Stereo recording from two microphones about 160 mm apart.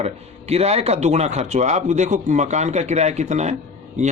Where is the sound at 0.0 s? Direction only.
40° right (ahead or behind).